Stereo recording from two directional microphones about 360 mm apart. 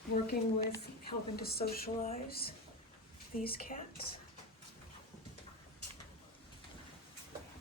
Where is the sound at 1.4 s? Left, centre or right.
Left.